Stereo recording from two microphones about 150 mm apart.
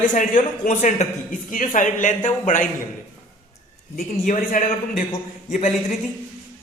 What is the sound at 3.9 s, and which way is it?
Speech, 55° left (ahead or behind).